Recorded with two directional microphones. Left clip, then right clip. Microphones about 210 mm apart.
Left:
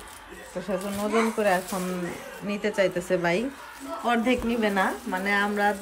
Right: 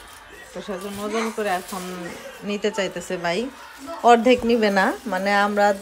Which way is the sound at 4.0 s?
15° right (ahead or behind).